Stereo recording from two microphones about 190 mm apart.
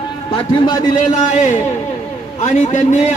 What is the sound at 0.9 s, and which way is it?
A man's voice, 40° left (ahead or behind).